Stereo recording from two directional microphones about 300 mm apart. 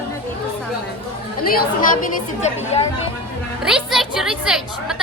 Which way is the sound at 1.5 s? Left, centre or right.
Left.